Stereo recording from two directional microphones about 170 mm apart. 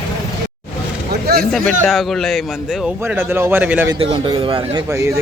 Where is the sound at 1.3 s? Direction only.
70° right (ahead or behind).